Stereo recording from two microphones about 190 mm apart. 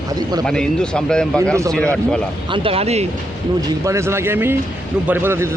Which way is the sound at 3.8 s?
15° right (ahead or behind).